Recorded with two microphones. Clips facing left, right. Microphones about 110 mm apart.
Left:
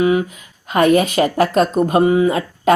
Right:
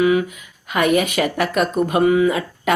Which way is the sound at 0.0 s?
30° left (ahead or behind).